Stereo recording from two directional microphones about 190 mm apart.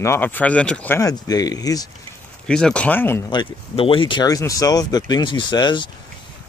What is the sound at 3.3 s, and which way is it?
Speech, 25° left (ahead or behind).